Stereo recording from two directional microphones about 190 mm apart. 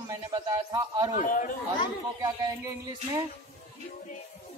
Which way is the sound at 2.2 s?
15° right (ahead or behind).